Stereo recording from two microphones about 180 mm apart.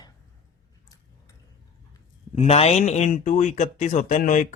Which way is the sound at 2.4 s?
35° left (ahead or behind).